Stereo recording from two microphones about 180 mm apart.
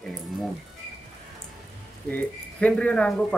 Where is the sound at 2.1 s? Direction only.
5° left (ahead or behind).